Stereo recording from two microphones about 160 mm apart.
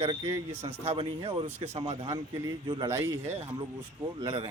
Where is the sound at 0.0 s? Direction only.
30° right (ahead or behind).